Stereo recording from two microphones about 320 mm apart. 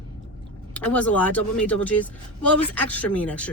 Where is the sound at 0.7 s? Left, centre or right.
Centre.